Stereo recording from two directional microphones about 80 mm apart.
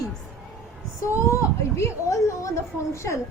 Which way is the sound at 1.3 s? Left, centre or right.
Left.